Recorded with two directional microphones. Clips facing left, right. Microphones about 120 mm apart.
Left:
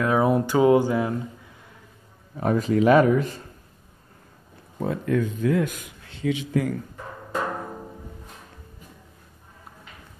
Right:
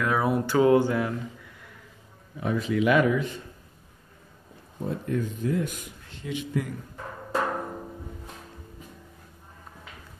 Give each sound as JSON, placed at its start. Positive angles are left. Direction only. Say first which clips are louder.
{"t": 0.0, "sound": "a sound", "louder": "left 4 dB", "side_deg": 25}
{"t": 2.3, "sound": "speech", "louder": "left 5 dB", "side_deg": 45}
{"t": 4.8, "sound": "speech", "louder": "left 5 dB", "side_deg": 90}